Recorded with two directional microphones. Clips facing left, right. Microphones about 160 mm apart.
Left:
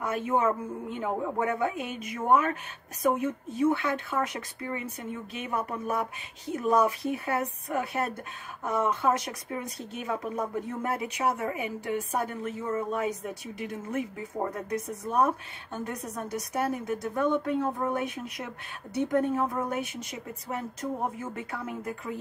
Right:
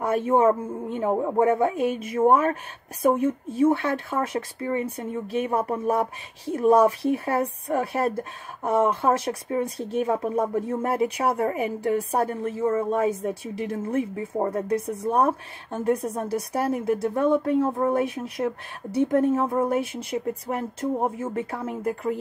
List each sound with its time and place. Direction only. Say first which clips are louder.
0.0 s a woman's voice: right 7 dB; 30° right (ahead or behind)
20.5 s speech: right 4 dB; 45° right (ahead or behind)
21.2 s speech: right 7 dB; 30° right (ahead or behind)